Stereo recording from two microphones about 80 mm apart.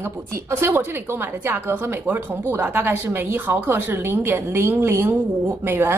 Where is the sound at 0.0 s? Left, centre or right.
Right.